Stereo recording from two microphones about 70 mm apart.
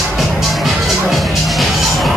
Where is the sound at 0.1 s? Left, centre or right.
Centre.